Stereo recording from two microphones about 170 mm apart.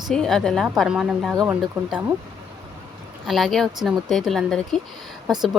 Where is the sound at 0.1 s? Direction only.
Centre (ahead or behind).